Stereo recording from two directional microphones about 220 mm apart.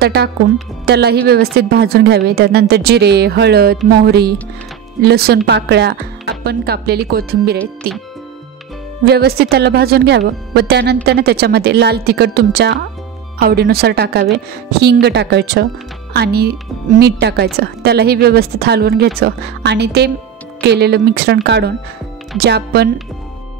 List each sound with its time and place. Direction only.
0.0 s a woman's voice: 45° right (ahead or behind)
9.0 s speech: 45° right (ahead or behind)